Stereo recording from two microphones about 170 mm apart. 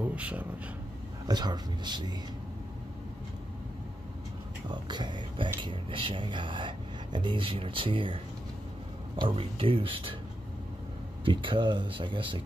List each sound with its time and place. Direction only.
0.0 s speech: 10° right (ahead or behind)
1.2 s speech: 25° right (ahead or behind)
4.6 s speech: 25° right (ahead or behind)
11.2 s speech: 30° right (ahead or behind)